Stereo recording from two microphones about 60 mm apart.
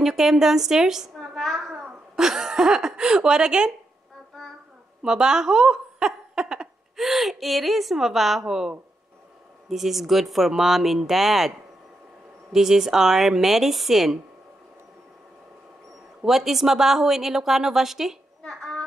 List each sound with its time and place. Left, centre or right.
0.0 s a woman's voice: centre
1.3 s a sound: centre
1.9 s speech: centre
4.4 s child singing: centre
5.0 s a woman's voice: centre
12.5 s a woman's voice: centre
16.3 s a woman's voice: centre
18.5 s a sound: centre